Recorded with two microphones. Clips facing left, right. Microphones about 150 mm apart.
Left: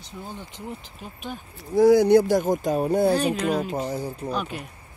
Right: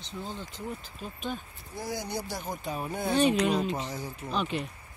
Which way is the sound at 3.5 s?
5° left (ahead or behind).